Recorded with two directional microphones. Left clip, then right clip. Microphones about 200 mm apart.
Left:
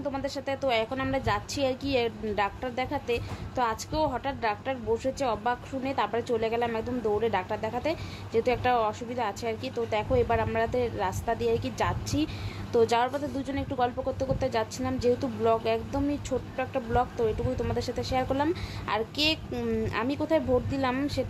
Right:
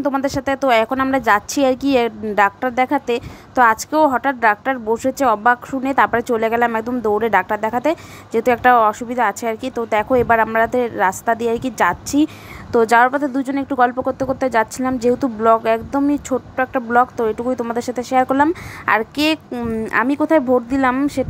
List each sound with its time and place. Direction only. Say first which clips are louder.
0.0 s a woman's voice: right 13 dB; 40° right (ahead or behind)
19.5 s speech: right 7 dB; 20° right (ahead or behind)
19.9 s a woman's voice: right 14 dB; 30° right (ahead or behind)